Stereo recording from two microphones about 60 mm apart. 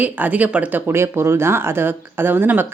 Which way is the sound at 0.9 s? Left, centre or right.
Right.